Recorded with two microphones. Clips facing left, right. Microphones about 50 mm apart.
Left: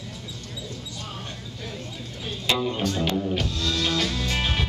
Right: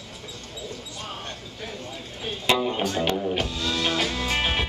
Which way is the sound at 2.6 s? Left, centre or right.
Centre.